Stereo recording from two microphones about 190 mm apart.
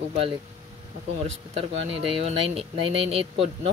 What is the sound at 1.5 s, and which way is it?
Speech, 30° right (ahead or behind).